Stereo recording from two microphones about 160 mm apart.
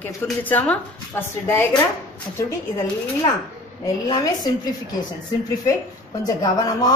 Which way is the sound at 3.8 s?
25° left (ahead or behind).